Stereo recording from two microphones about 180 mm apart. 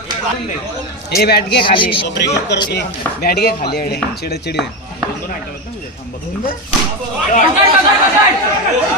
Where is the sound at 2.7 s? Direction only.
60° left (ahead or behind).